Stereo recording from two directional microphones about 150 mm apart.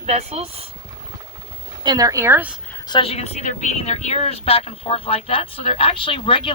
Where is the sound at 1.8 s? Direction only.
25° right (ahead or behind).